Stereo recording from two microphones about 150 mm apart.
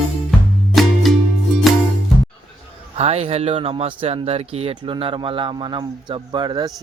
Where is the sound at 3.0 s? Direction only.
45° right (ahead or behind).